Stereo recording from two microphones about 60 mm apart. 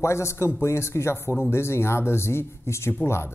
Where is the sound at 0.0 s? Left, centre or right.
Left.